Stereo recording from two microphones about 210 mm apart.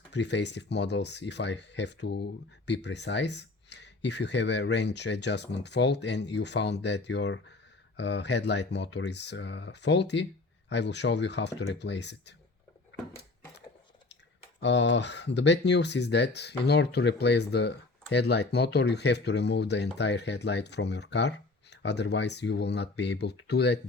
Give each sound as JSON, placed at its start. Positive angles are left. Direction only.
{"t": 0.1, "sound": "speech", "side_deg": 55}
{"t": 14.6, "sound": "speech", "side_deg": 60}